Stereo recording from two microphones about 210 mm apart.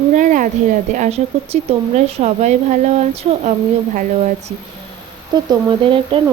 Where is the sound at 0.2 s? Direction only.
40° right (ahead or behind).